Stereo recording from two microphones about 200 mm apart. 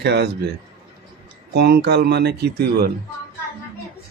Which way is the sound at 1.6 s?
55° right (ahead or behind).